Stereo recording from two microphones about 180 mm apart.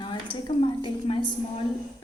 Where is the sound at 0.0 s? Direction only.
25° left (ahead or behind).